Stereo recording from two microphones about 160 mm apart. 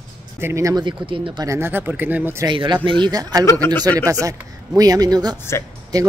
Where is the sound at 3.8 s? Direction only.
25° right (ahead or behind).